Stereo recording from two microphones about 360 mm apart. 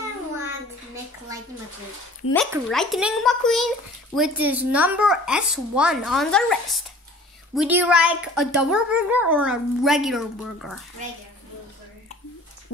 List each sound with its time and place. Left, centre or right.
2.3 s a woman's voice: centre